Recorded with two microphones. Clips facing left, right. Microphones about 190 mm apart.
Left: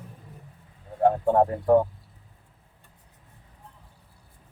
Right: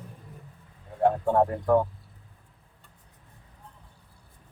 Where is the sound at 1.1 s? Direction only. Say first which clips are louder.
Left 3 dB; 30° left (ahead or behind).